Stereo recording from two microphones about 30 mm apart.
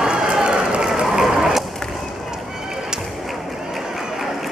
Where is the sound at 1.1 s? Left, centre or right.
Centre.